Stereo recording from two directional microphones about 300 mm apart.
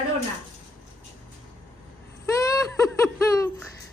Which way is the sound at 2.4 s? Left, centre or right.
Centre.